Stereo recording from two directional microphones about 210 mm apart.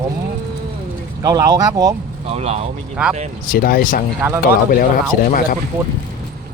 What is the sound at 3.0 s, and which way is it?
Speech, 5° right (ahead or behind).